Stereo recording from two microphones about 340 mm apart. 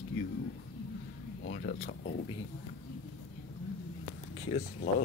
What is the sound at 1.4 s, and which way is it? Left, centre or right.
Speech, left.